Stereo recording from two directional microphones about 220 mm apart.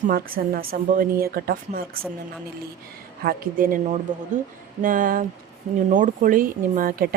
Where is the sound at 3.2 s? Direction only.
40° right (ahead or behind).